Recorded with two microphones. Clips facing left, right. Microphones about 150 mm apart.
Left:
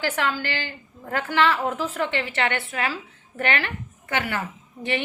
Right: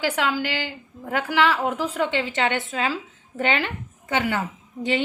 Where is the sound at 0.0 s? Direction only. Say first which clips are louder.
Right 2 dB; 10° right (ahead or behind).